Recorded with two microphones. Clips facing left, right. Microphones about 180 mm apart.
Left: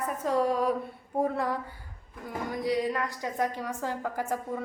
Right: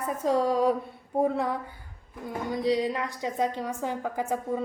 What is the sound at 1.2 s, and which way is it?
A woman's voice, 20° right (ahead or behind).